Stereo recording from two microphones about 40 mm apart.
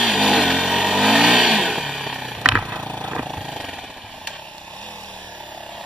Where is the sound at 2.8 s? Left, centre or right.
Left.